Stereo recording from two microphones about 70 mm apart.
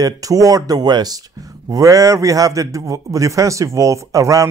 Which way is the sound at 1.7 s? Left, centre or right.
Right.